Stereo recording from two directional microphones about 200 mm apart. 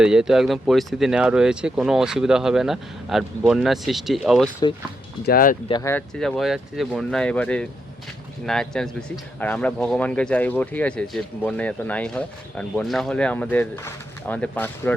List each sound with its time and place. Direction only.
0.0 s a man's voice: 5° right (ahead or behind)
5.2 s speech: 45° left (ahead or behind)
5.6 s speech: 20° left (ahead or behind)
5.9 s a man's voice: 5° left (ahead or behind)